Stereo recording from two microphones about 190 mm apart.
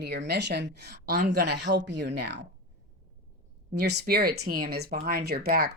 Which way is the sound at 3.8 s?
60° right (ahead or behind).